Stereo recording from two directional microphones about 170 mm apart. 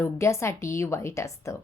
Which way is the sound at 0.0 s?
15° left (ahead or behind).